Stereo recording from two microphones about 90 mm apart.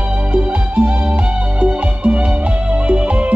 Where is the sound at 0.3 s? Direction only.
15° right (ahead or behind).